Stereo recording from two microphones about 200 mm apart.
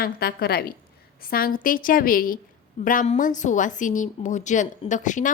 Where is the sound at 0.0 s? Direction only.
50° left (ahead or behind).